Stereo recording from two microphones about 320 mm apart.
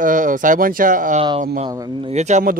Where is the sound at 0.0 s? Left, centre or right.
Right.